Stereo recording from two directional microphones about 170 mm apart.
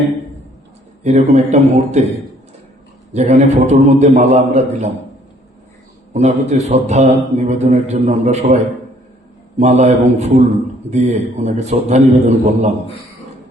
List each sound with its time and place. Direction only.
1.0 s a man's voice: 40° right (ahead or behind)
3.1 s a man's voice: 40° right (ahead or behind)
6.1 s a man's voice: 40° right (ahead or behind)
9.6 s a man's voice: 40° right (ahead or behind)